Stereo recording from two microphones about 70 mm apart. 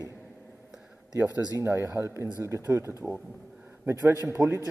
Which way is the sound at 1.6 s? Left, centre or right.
Right.